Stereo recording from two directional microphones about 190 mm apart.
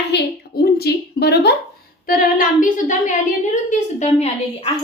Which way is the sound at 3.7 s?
35° left (ahead or behind).